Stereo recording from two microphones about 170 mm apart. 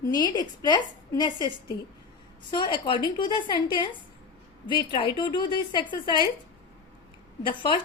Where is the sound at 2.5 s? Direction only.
30° left (ahead or behind).